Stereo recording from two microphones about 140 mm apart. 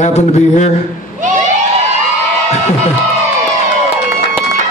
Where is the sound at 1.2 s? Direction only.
60° right (ahead or behind).